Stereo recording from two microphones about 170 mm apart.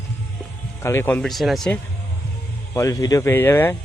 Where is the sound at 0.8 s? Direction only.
15° left (ahead or behind).